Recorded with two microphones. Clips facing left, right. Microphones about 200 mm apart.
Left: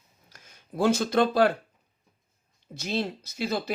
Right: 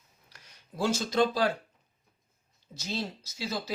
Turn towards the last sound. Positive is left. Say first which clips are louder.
# left 5 dB
turn(degrees=55)  # may be behind; listen again after turning